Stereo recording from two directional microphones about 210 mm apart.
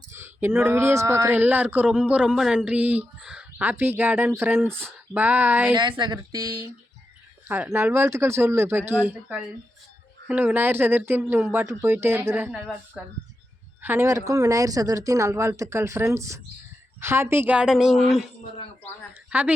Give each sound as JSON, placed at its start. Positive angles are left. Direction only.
{"t": 0.1, "sound": "speech", "side_deg": -10}
{"t": 5.7, "sound": "a woman's voice", "side_deg": -20}